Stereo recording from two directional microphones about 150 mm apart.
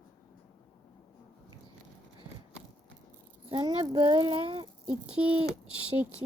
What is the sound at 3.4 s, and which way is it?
Speech, 30° right (ahead or behind).